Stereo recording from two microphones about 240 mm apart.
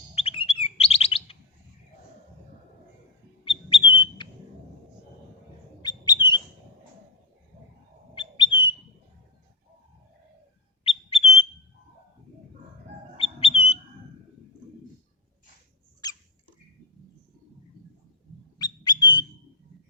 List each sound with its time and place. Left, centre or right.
0.1 s chirp: left
3.7 s bird: centre
5.8 s bird: centre
8.4 s bird: left
10.8 s bird: left
13.1 s bird: left
16.0 s rodents: centre
18.6 s a sound: centre